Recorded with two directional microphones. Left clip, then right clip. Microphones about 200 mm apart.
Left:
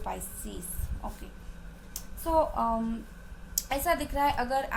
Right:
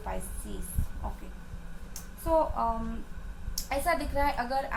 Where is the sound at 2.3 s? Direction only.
50° left (ahead or behind).